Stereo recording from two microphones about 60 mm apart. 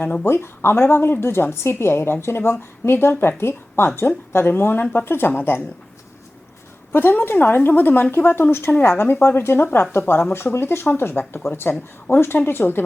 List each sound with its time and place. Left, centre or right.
0.0 s a woman's voice: left
0.3 s a woman's voice: left
6.9 s speech: left
10.3 s speech: left